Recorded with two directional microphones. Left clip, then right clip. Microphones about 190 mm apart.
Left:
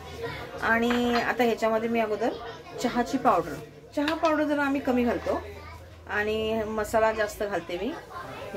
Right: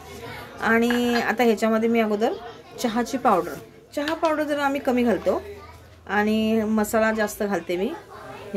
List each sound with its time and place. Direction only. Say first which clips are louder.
0.6 s speech: right 4 dB; 45° right (ahead or behind)